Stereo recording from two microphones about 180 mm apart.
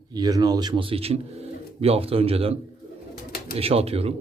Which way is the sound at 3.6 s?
35° right (ahead or behind).